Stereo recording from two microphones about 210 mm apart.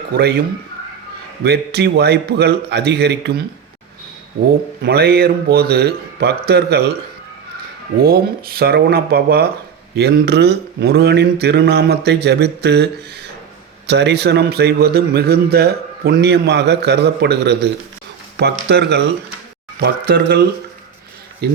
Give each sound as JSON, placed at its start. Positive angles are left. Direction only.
{"t": 0.1, "sound": "a man's voice", "side_deg": -50}
{"t": 1.5, "sound": "a man's voice", "side_deg": -50}
{"t": 4.8, "sound": "a man's voice", "side_deg": -50}
{"t": 7.9, "sound": "a man's voice", "side_deg": -45}
{"t": 18.7, "sound": "a man's voice", "side_deg": -50}